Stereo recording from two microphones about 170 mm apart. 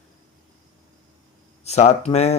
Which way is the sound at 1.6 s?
40° left (ahead or behind).